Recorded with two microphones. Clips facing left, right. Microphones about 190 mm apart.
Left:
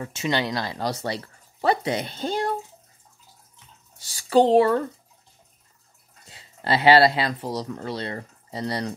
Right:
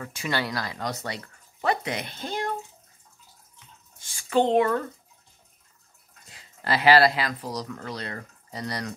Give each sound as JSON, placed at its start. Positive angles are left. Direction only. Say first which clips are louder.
{"t": 0.0, "sound": "speech", "louder": "left 4 dB", "side_deg": 25}
{"t": 4.0, "sound": "speech", "louder": "left 5 dB", "side_deg": 35}
{"t": 6.2, "sound": "speech", "louder": "left 3 dB", "side_deg": 25}